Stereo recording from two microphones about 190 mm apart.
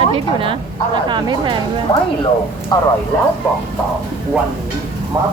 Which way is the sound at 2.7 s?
20° left (ahead or behind).